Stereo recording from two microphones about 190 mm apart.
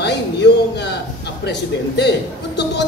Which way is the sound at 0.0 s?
65° left (ahead or behind).